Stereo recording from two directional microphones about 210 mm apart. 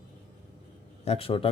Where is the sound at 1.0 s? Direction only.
30° left (ahead or behind).